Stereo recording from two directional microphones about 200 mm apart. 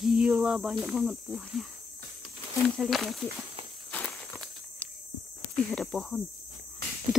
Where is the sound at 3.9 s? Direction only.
5° left (ahead or behind).